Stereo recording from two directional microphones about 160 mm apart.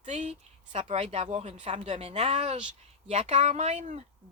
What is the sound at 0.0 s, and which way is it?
Speech, 45° right (ahead or behind).